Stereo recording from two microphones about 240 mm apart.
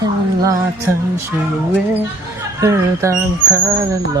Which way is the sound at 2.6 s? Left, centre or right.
Centre.